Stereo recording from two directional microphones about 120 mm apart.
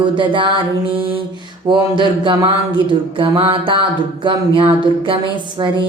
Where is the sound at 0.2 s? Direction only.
45° right (ahead or behind).